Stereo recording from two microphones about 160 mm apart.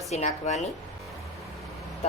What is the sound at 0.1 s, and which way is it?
Speech, 45° left (ahead or behind).